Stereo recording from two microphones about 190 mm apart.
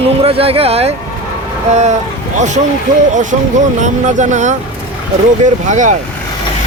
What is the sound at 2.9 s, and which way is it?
Speech, 20° right (ahead or behind).